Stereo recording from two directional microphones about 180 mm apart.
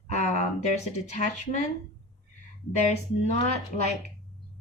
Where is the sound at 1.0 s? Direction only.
45° left (ahead or behind).